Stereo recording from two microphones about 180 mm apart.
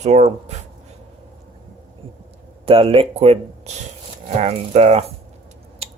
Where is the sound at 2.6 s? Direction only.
30° right (ahead or behind).